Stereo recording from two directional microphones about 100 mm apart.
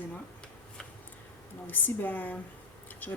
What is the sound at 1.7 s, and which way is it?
Speech, 20° left (ahead or behind).